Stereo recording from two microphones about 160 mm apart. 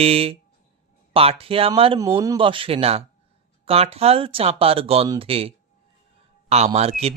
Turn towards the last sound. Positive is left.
turn(degrees=-40)  # may be behind; listen again after turning